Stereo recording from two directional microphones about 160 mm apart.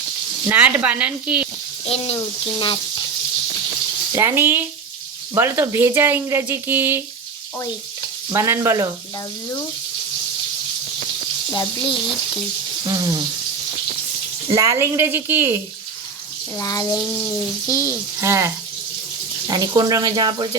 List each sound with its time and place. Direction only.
0.4 s speech: 10° right (ahead or behind)
2.1 s speech: 30° left (ahead or behind)
4.1 s speech: 15° right (ahead or behind)
8.3 s speech: 15° right (ahead or behind)
11.5 s speech: 25° left (ahead or behind)
12.8 s speech: 25° right (ahead or behind)
14.4 s speech: 20° right (ahead or behind)
16.6 s speech: 20° left (ahead or behind)
18.2 s speech: 15° right (ahead or behind)